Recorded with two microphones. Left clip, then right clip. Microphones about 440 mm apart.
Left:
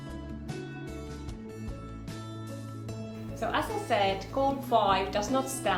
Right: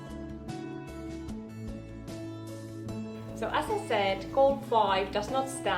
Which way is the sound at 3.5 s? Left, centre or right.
Centre.